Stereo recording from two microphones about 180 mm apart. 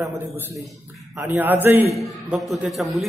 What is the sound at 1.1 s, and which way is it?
Speech, 10° right (ahead or behind).